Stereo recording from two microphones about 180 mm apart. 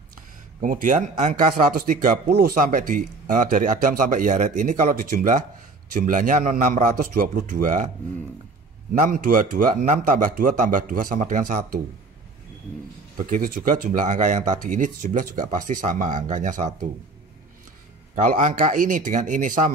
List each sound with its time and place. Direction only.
0.6 s a man's voice: 45° right (ahead or behind)
9.0 s a man's voice: 45° right (ahead or behind)
13.2 s a man's voice: 50° right (ahead or behind)
18.1 s a man's voice: 45° right (ahead or behind)